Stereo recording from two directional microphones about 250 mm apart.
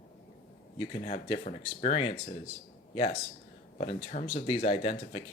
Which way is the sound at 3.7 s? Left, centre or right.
Left.